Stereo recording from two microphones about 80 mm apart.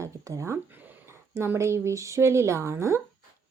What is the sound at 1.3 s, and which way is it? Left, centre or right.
Speech, right.